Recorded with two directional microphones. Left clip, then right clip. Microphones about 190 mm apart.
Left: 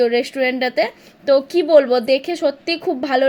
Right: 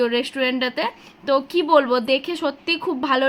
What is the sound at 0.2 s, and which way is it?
A woman's voice, 10° left (ahead or behind).